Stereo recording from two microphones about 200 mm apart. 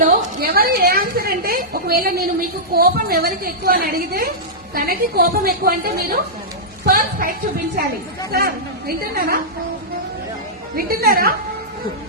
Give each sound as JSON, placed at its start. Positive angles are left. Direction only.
{"t": 0.0, "sound": "a woman's voice", "side_deg": -45}
{"t": 10.8, "sound": "a woman's voice", "side_deg": -50}